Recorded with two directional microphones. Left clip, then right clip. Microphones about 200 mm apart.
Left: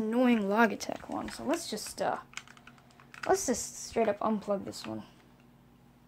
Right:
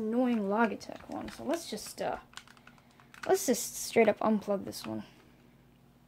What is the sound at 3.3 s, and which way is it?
Speech, 25° right (ahead or behind).